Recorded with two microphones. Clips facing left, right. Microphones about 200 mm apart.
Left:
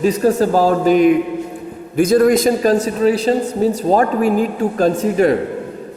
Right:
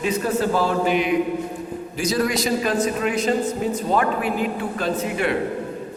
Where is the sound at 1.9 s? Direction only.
55° left (ahead or behind).